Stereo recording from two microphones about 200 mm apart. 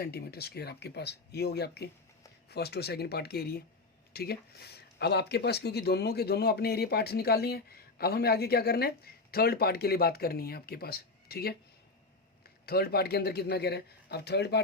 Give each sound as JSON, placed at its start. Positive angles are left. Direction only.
{"t": 0.0, "sound": "speech", "side_deg": 50}
{"t": 12.6, "sound": "speech", "side_deg": 50}